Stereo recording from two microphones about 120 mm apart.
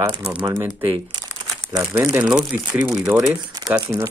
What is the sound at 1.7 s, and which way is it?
Speech, 20° right (ahead or behind).